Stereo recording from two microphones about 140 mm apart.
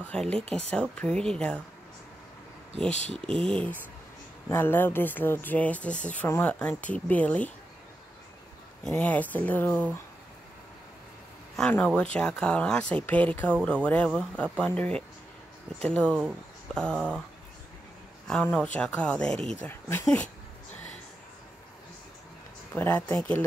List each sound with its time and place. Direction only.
0.0 s speech: 5° left (ahead or behind)
3.4 s speech: 5° left (ahead or behind)
8.8 s speech: 10° left (ahead or behind)
11.7 s speech: 10° left (ahead or behind)
18.2 s speech: 10° left (ahead or behind)
19.6 s speech: 15° left (ahead or behind)
22.8 s speech: 10° left (ahead or behind)